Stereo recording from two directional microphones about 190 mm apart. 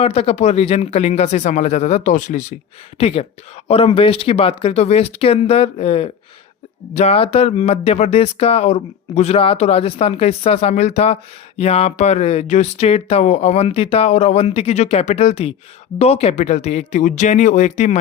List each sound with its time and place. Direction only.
0.0 s speech: 30° left (ahead or behind)
3.0 s speech: 30° left (ahead or behind)